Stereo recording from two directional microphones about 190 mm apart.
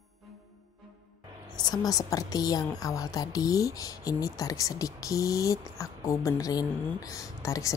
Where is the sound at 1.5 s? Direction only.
20° left (ahead or behind).